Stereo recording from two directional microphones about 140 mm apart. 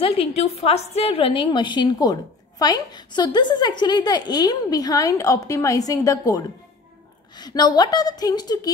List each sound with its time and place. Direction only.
0.0 s a woman's voice: 45° left (ahead or behind); by 8.7 s 30° left (ahead or behind)